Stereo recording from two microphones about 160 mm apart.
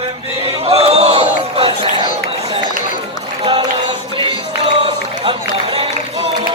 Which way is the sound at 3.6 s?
30° right (ahead or behind).